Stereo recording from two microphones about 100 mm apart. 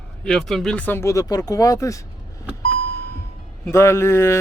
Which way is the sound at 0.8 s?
15° left (ahead or behind).